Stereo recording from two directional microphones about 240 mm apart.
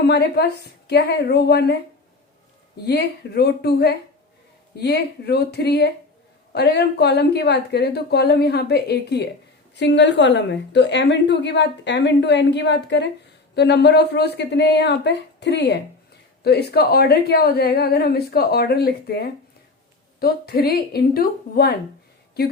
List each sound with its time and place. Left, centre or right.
0.0 s a woman's voice: left
2.8 s a woman's voice: left